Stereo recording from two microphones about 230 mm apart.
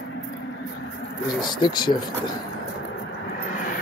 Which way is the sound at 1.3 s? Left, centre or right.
Centre.